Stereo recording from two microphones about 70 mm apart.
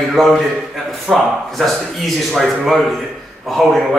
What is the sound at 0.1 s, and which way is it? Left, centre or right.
A man's voice, centre.